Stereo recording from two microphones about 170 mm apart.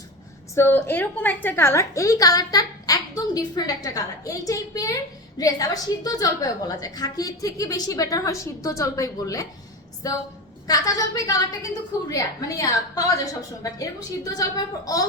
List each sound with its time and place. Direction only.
0.5 s a woman's voice: 15° left (ahead or behind)